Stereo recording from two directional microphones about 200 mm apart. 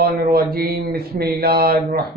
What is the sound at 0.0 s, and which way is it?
Speech, 45° right (ahead or behind).